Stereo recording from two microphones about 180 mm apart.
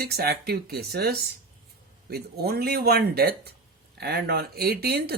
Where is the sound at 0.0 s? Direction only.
60° right (ahead or behind).